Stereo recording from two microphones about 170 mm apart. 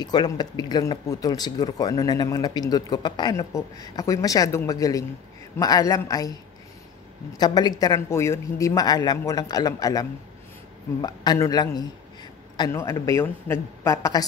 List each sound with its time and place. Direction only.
0.0 s speech: 25° left (ahead or behind)
7.3 s speech: 25° left (ahead or behind)